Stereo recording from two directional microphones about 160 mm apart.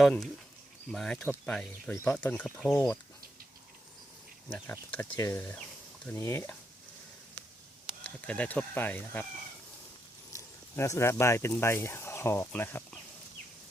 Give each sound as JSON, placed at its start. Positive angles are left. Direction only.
{"t": 0.0, "sound": "speech", "side_deg": 0}
{"t": 4.4, "sound": "speech", "side_deg": 10}
{"t": 8.0, "sound": "speech", "side_deg": 10}
{"t": 10.3, "sound": "speech", "side_deg": 20}